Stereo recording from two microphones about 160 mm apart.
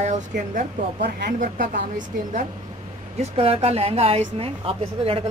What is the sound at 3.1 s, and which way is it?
A woman's voice, 40° right (ahead or behind).